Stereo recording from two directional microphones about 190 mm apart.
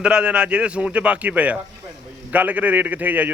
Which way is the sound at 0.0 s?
5° right (ahead or behind).